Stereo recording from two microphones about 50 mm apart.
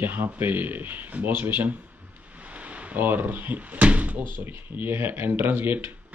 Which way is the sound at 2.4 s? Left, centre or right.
Right.